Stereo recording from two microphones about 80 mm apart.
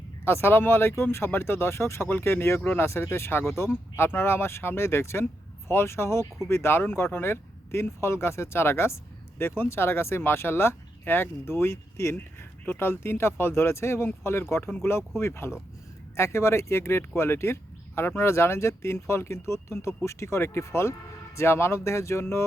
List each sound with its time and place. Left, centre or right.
0.3 s speech: left